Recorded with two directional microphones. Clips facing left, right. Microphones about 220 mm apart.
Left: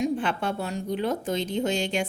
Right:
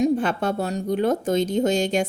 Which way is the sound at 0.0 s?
40° right (ahead or behind).